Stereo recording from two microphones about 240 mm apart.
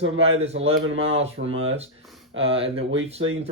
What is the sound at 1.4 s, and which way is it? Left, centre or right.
Speech, right.